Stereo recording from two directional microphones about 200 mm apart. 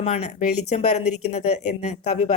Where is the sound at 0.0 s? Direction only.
35° left (ahead or behind).